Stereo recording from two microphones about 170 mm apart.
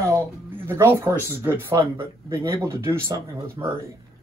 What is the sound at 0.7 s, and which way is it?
Speech, 15° right (ahead or behind).